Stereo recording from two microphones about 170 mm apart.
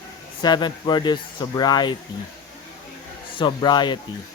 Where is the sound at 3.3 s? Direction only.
25° left (ahead or behind).